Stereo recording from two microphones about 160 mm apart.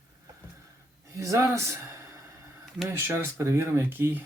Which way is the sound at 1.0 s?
20° right (ahead or behind).